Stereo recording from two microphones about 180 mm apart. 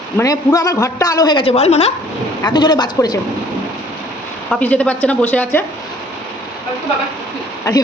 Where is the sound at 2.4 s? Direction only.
25° left (ahead or behind).